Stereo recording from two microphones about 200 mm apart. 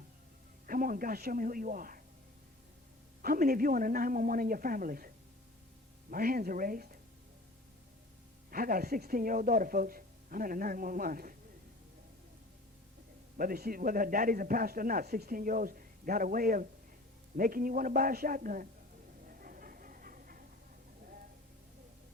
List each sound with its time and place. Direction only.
0.7 s a man's voice: 45° right (ahead or behind)
3.2 s a man's voice: 45° right (ahead or behind)
8.4 s a man's voice: 45° right (ahead or behind)
13.3 s a man's voice: 45° right (ahead or behind)
19.3 s a sound: 45° right (ahead or behind)